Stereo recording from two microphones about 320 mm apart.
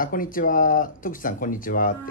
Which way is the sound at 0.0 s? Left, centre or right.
Left.